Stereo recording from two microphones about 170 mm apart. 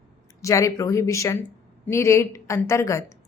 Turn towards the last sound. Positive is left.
turn(degrees=15)  # may be behind; listen again after turning